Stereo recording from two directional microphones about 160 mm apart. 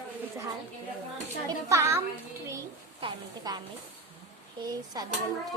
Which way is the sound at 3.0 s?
25° right (ahead or behind).